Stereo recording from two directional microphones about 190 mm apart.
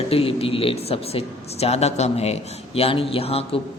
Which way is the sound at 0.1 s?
30° left (ahead or behind).